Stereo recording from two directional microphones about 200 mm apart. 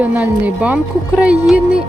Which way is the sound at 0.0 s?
5° right (ahead or behind).